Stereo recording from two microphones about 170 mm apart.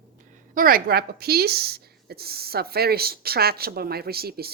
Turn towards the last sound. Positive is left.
turn(degrees=-65)  # may be behind; listen again after turning